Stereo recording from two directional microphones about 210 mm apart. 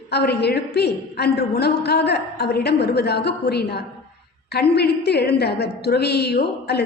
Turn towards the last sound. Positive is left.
turn(degrees=50)  # may be behind; listen again after turning